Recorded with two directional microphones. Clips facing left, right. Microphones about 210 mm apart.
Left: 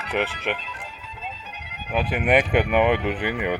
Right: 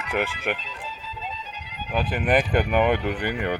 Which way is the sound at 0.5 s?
55° left (ahead or behind).